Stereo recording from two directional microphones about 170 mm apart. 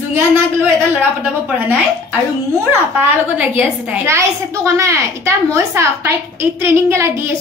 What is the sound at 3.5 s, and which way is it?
A woman's voice, 10° right (ahead or behind).